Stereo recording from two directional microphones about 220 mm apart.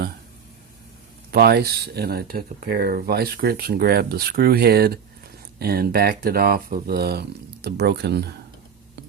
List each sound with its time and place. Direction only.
1.3 s speech: 45° right (ahead or behind)